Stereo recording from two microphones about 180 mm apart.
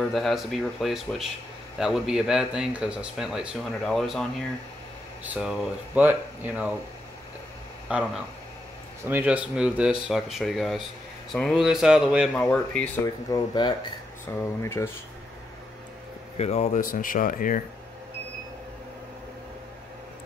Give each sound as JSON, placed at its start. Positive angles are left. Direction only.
{"t": 0.0, "sound": "speech", "side_deg": 0}
{"t": 7.9, "sound": "speech", "side_deg": -10}
{"t": 12.4, "sound": "speech", "side_deg": 5}
{"t": 13.0, "sound": "speech", "side_deg": 20}
{"t": 14.2, "sound": "speech", "side_deg": 15}
{"t": 16.3, "sound": "speech", "side_deg": 35}